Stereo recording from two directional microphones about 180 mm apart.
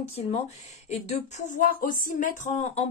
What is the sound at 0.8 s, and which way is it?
Speech, 40° left (ahead or behind).